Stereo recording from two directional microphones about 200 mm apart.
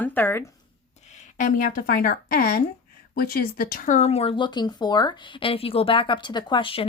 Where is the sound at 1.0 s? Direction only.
35° left (ahead or behind).